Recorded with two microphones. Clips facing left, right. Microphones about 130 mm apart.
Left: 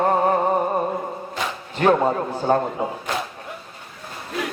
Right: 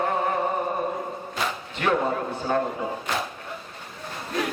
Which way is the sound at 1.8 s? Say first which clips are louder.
Left 7 dB; 40° left (ahead or behind).